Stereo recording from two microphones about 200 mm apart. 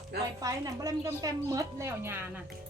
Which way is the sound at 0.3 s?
20° right (ahead or behind).